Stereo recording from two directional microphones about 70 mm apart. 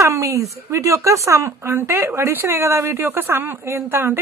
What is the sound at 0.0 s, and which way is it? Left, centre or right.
A woman's voice, right.